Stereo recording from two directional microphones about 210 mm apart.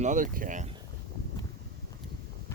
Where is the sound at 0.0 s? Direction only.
35° right (ahead or behind).